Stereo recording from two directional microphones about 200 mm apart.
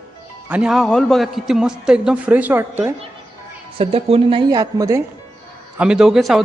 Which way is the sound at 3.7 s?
30° right (ahead or behind).